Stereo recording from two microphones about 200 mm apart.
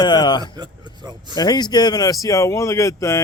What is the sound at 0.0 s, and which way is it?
Speech, 20° left (ahead or behind).